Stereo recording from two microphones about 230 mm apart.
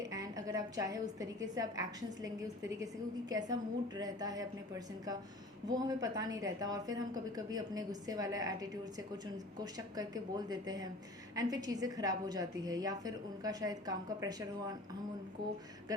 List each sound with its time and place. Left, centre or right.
0.0 s a woman's voice: centre
5.7 s a woman's voice: centre